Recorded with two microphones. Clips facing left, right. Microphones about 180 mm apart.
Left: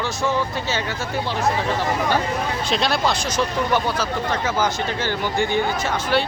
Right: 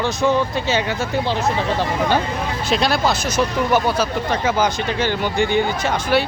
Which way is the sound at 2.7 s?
Centre (ahead or behind).